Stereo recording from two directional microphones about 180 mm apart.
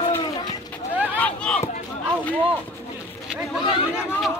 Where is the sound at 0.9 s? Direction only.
10° right (ahead or behind).